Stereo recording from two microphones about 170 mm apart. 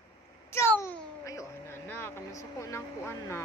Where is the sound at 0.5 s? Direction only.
15° left (ahead or behind).